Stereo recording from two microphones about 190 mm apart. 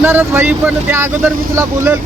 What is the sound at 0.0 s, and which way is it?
Speech, 10° right (ahead or behind).